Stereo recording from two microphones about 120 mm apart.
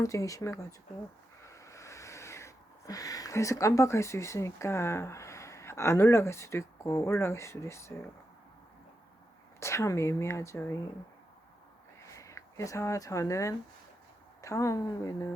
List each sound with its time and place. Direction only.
0.0 s speech: 25° left (ahead or behind)
1.4 s a sound: 25° left (ahead or behind)
9.6 s speech: 25° left (ahead or behind)
12.1 s speech: 25° left (ahead or behind)